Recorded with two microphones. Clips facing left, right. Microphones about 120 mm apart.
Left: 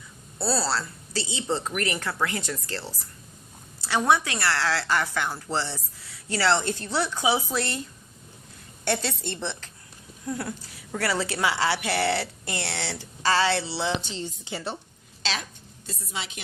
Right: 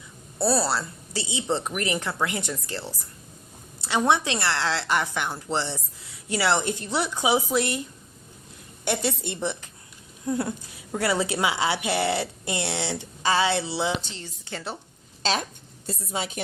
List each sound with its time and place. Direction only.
0.3 s a woman's voice: 20° right (ahead or behind)
14.1 s a woman's voice: 15° left (ahead or behind)
15.2 s a woman's voice: 45° right (ahead or behind)